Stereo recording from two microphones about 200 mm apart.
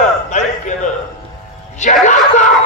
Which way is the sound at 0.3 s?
40° left (ahead or behind).